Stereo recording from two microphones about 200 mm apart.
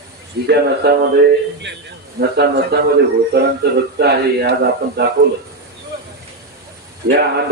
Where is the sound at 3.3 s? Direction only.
55° right (ahead or behind).